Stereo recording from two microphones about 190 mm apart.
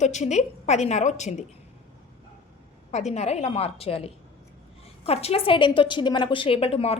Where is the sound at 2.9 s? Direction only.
35° left (ahead or behind).